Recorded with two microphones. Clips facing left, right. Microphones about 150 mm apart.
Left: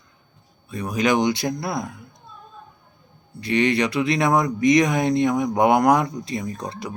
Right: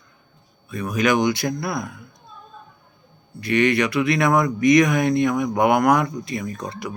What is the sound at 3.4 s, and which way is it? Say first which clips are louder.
Speech: right 1 dB; 30° left (ahead or behind).